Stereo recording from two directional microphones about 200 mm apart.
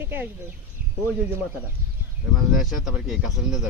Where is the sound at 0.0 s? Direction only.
10° right (ahead or behind).